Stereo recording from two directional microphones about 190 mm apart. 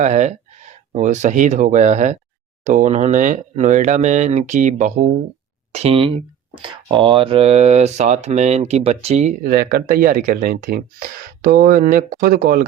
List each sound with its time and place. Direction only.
0.0 s speech: 35° right (ahead or behind)